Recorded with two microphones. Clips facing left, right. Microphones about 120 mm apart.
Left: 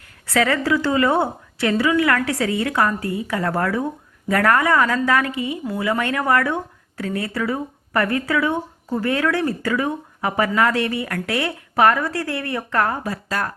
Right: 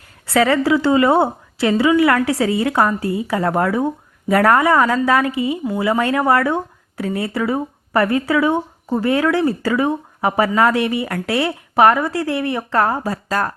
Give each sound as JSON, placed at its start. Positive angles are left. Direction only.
{"t": 0.3, "sound": "speech", "side_deg": -25}